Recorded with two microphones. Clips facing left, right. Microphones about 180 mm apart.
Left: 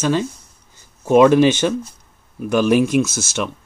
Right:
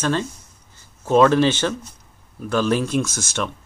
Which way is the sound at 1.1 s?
15° left (ahead or behind).